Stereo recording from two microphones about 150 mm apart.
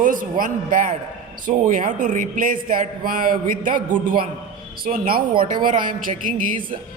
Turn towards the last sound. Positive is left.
turn(degrees=-65)  # may be behind; listen again after turning